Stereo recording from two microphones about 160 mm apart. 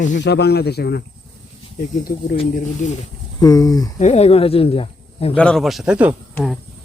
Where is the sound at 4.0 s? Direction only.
40° left (ahead or behind).